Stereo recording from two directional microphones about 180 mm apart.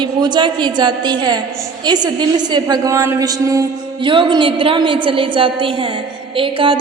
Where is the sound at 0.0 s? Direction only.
25° right (ahead or behind).